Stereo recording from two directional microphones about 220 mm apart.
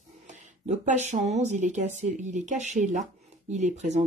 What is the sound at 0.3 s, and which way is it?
Speech, 35° right (ahead or behind).